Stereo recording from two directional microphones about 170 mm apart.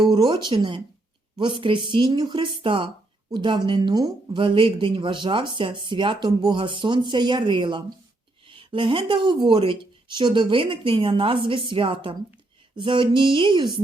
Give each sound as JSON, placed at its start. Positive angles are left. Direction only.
{"t": 0.0, "sound": "speech", "side_deg": -25}